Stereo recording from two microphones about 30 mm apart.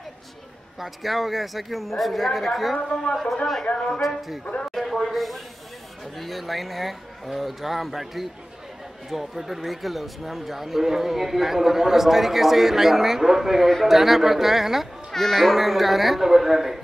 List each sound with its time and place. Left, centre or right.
0.7 s speech: centre
2.8 s a man's voice: left
3.7 s speech: left
4.6 s a man's voice: centre
15.1 s speech: centre
15.5 s a man's voice: centre